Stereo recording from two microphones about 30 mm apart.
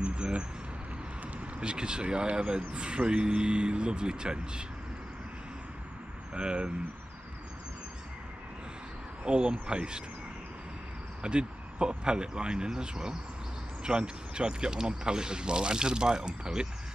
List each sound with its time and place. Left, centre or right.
0.0 s a sound: right
1.4 s speech: right
6.3 s speech: right
9.4 s speech: right
11.2 s speech: right